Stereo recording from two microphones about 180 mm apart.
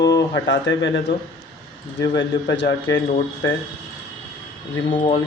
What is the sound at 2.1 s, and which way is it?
Speech, 85° left.